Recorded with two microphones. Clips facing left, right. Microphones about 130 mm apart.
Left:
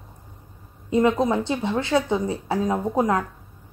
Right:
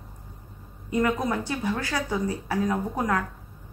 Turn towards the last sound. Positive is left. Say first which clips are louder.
# left 5 dB
turn(degrees=25)  # may be behind; listen again after turning